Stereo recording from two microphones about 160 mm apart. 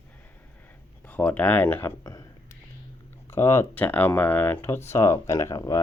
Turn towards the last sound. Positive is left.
turn(degrees=20)  # may be behind; listen again after turning